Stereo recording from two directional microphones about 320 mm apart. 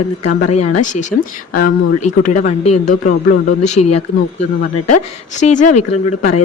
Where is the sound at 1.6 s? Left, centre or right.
Left.